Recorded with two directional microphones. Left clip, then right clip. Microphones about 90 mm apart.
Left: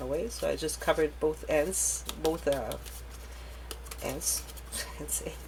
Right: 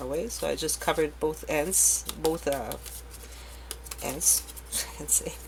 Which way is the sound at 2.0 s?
Centre (ahead or behind).